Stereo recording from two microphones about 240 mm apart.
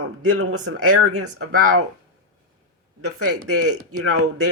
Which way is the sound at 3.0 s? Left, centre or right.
Right.